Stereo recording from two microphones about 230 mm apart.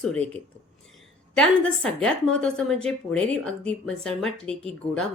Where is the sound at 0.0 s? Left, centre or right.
Centre.